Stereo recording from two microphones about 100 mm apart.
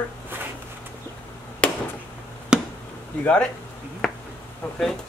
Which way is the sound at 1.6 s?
10° left (ahead or behind).